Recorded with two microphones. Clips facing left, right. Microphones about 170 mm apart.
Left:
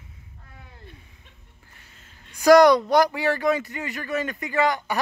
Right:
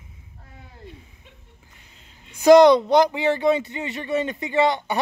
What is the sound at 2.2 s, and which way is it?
Speech, 25° right (ahead or behind).